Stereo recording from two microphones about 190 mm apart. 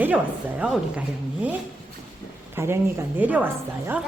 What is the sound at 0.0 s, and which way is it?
Speech, 5° right (ahead or behind).